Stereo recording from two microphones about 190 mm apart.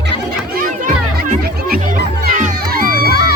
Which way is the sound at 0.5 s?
45° right (ahead or behind).